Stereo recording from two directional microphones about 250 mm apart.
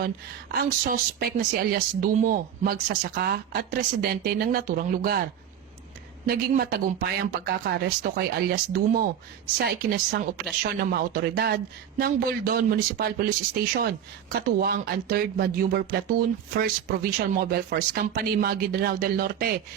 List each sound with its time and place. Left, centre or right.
0.0 s a woman's voice: right
6.2 s a woman's voice: right
14.4 s a woman's voice: right